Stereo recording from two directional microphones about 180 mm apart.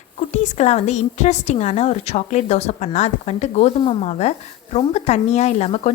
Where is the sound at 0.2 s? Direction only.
40° left (ahead or behind).